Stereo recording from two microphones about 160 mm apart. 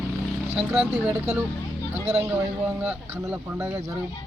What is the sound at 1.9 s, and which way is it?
Speech, 40° right (ahead or behind).